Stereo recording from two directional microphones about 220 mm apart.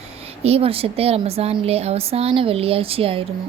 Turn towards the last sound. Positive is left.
turn(degrees=-25)  # may be behind; listen again after turning